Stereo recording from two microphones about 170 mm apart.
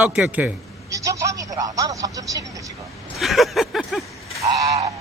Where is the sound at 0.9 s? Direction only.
20° right (ahead or behind).